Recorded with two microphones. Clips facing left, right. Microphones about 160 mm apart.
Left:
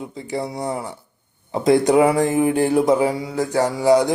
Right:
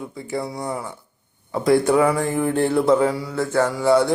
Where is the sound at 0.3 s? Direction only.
20° left (ahead or behind).